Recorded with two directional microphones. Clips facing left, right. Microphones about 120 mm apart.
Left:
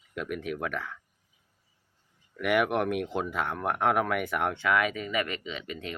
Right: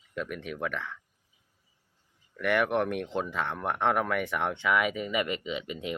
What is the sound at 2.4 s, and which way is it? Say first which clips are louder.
Speech: left 1 dB; 5° left (ahead or behind).